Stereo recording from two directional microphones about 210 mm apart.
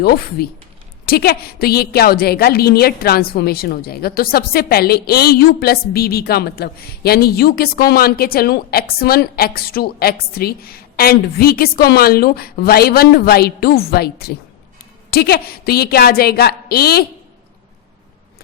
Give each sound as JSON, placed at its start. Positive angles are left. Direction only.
{"t": 0.0, "sound": "a woman's voice", "side_deg": 45}